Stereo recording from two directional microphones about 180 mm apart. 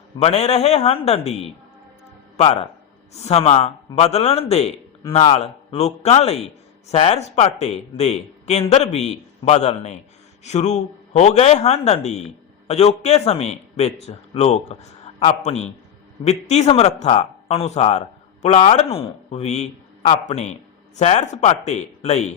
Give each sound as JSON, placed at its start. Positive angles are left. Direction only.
{"t": 0.2, "sound": "a man's voice", "side_deg": 35}